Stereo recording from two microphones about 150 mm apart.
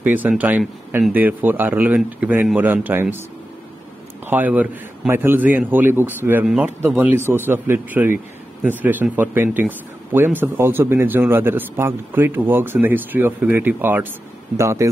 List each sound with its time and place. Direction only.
0.0 s speech: 10° right (ahead or behind)
4.3 s speech: 10° right (ahead or behind)